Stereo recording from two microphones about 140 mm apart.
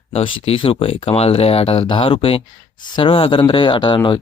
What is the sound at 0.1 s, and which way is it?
Speech, 40° left (ahead or behind).